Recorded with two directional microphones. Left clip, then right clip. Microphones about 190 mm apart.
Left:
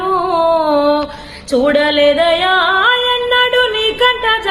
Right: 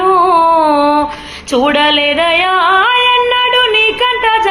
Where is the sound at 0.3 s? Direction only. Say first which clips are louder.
Right 3 dB; 20° left (ahead or behind).